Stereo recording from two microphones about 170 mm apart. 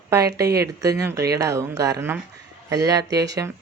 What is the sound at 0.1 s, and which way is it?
Speech, 20° right (ahead or behind).